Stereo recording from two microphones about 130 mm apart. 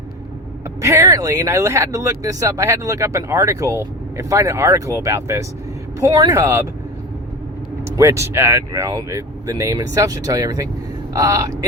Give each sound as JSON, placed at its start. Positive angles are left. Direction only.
{"t": 0.8, "sound": "speech", "side_deg": -25}
{"t": 7.9, "sound": "speech", "side_deg": -20}